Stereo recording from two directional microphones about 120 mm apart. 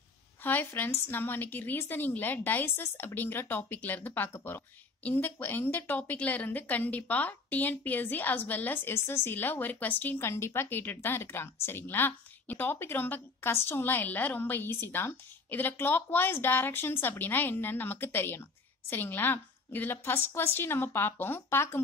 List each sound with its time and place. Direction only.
0.4 s a woman's voice: 15° left (ahead or behind)